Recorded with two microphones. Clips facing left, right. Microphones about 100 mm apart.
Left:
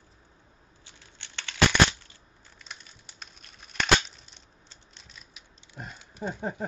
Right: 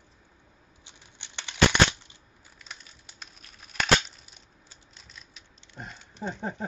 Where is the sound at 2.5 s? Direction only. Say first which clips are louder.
Even; centre (ahead or behind).